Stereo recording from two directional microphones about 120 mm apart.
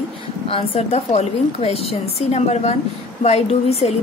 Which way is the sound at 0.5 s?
55° left (ahead or behind).